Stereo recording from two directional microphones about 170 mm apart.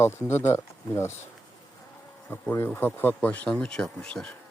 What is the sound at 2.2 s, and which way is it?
Speech, 10° left (ahead or behind).